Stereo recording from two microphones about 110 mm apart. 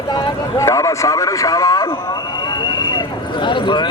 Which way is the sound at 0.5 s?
30° left (ahead or behind).